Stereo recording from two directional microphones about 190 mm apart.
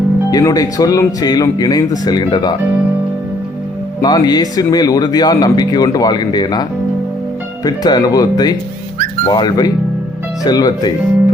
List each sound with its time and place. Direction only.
0.3 s speech: 20° left (ahead or behind)
4.0 s speech: 20° left (ahead or behind)